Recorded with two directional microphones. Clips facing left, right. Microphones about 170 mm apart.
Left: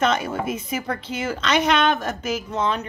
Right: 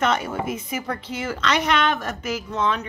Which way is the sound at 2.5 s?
25° left (ahead or behind).